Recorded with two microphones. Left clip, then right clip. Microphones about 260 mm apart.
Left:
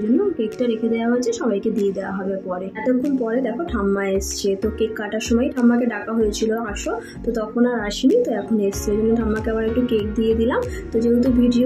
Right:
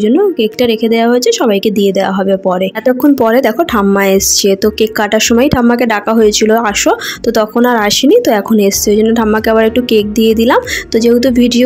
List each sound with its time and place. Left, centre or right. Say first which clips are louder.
0.6 s a woman's voice: right 11 dB; right
3.3 s a woman's voice: right 13 dB; right